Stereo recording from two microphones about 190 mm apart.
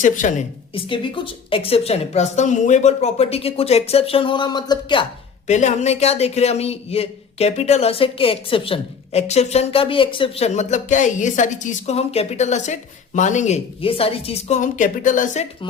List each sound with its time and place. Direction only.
0.0 s a woman's voice: 40° left (ahead or behind)
0.7 s a man's voice: 25° left (ahead or behind)
5.5 s a man's voice: 35° left (ahead or behind)